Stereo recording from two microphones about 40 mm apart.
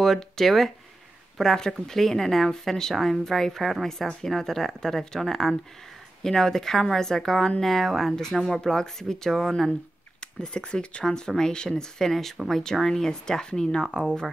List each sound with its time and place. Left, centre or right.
0.0 s speech: centre
8.5 s speech: centre
10.2 s speech: left